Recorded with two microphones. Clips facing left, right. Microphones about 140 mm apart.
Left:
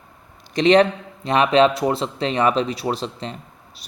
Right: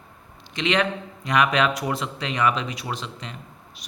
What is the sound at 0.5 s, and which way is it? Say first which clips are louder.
Speech: left 9 dB; 35° left (ahead or behind).